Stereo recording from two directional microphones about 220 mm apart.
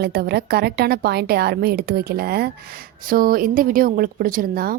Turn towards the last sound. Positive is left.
turn(degrees=-40)  # may be behind; listen again after turning